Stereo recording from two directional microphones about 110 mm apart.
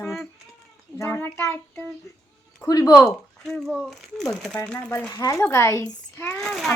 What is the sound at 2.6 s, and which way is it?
Speech, 35° left (ahead or behind).